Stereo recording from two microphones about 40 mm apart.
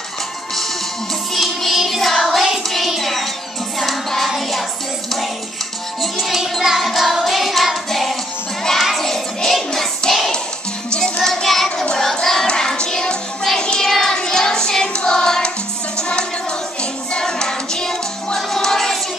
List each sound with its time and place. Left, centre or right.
1.3 s music: centre
6.1 s music: centre
11.2 s child singing: centre
11.8 s child singing: centre
12.2 s child singing: centre
16.0 s music: left